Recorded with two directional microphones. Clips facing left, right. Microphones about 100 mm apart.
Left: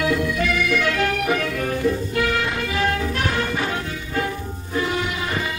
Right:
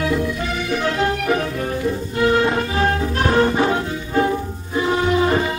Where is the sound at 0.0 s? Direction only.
30° right (ahead or behind).